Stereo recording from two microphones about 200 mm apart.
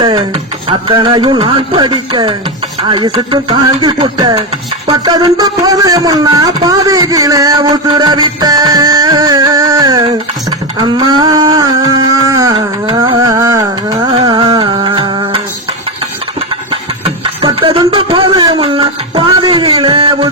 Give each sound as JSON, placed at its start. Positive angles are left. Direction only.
{"t": 0.0, "sound": "speech", "side_deg": -20}
{"t": 12.5, "sound": "music", "side_deg": -25}
{"t": 14.1, "sound": "music", "side_deg": -25}
{"t": 17.2, "sound": "a sound", "side_deg": -25}